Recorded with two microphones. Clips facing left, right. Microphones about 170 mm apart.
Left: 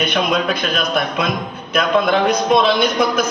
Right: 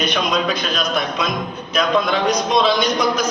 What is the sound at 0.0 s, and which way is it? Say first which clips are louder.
A man's voice: left 2 dB; 55° left (ahead or behind).